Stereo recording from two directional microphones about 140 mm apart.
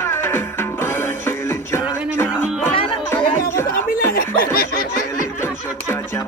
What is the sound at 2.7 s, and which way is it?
Music, 40° left (ahead or behind).